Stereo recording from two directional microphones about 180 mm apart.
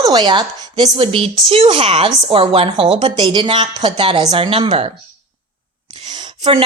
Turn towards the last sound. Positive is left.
turn(degrees=-25)  # may be behind; listen again after turning